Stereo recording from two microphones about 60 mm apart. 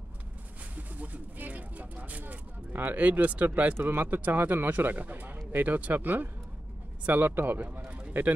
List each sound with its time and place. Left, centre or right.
0.7 s speech: right
3.7 s a man's voice: right